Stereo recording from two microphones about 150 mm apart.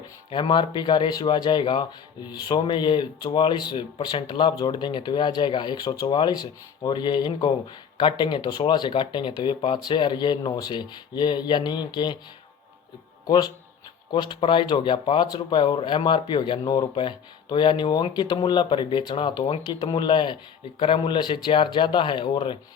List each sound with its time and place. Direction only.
0.3 s speech: 35° left (ahead or behind)
13.2 s speech: 25° left (ahead or behind)